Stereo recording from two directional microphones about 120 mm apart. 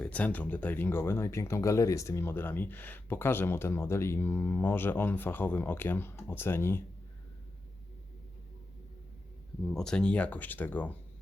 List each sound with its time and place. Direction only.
0.0 s speech: 10° left (ahead or behind)
9.6 s speech: 5° left (ahead or behind)